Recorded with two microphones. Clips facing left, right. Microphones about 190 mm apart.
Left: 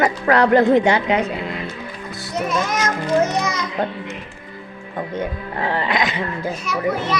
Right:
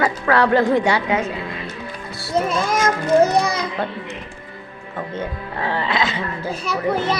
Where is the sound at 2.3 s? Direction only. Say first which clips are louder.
Right 2 dB; 30° right (ahead or behind).